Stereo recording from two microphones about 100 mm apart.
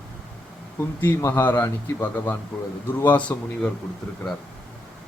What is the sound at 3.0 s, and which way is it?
Speech, 15° left (ahead or behind).